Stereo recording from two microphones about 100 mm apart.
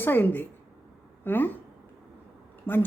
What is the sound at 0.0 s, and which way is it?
Speech, 20° left (ahead or behind).